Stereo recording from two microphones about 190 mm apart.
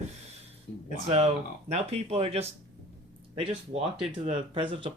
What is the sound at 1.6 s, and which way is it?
Speech, 35° right (ahead or behind).